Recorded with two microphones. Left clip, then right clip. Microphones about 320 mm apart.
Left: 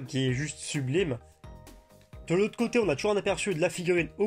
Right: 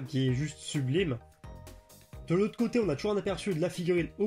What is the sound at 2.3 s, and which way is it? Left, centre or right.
Speech, left.